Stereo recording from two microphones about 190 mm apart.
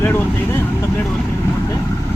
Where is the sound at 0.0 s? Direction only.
10° left (ahead or behind).